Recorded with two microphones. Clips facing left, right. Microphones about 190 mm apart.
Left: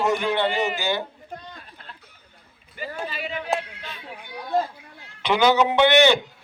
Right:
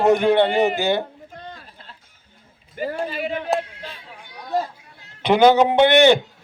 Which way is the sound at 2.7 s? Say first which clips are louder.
Right 6 dB; 50° right (ahead or behind).